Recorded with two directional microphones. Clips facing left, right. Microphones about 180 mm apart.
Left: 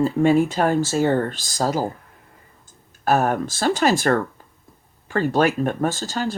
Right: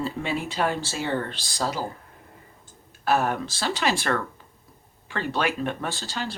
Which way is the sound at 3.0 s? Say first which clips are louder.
Left 4 dB; 45° left (ahead or behind).